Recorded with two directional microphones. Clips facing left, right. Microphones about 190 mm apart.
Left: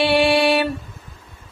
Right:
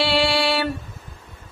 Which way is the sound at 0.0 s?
20° left (ahead or behind).